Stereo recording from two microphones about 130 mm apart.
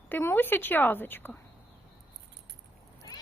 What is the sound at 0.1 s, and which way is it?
Speech, 15° left (ahead or behind).